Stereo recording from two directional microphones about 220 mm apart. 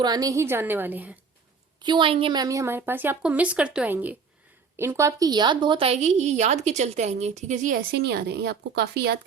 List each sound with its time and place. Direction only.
0.0 s a woman's voice: 15° right (ahead or behind)
1.8 s a woman's voice: 20° right (ahead or behind); by 9.1 s 50° right (ahead or behind)